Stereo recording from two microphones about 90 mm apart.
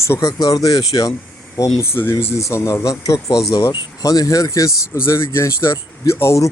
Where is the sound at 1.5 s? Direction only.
30° left (ahead or behind).